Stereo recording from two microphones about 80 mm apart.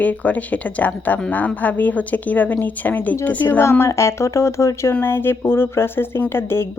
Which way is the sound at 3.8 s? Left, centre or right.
Left.